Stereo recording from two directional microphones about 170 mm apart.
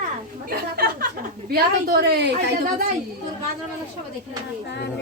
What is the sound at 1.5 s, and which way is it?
A woman's voice, 65° right (ahead or behind).